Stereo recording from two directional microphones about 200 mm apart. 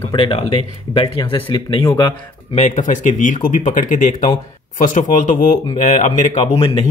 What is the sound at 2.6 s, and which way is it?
Speech, 40° left (ahead or behind).